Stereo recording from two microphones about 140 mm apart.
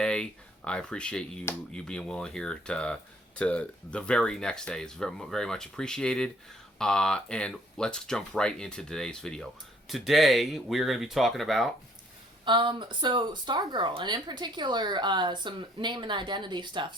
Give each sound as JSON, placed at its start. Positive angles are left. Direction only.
{"t": 0.0, "sound": "speech", "side_deg": 5}
{"t": 12.5, "sound": "speech", "side_deg": -35}